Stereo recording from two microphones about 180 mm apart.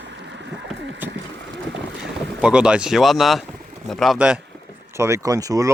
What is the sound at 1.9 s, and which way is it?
Boat, 90° right.